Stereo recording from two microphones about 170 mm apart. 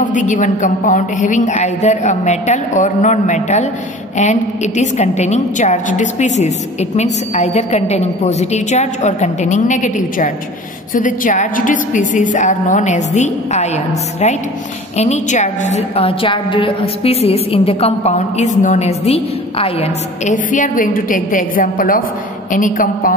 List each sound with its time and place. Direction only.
0.0 s a woman's voice: 50° left (ahead or behind)
15.0 s a woman's voice: 45° left (ahead or behind)